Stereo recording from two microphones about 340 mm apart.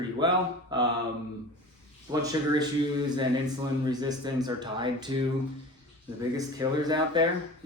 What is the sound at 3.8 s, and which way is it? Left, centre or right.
Speech, centre.